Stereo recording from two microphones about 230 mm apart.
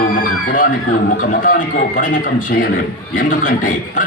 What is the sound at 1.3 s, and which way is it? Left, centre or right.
Speech, left.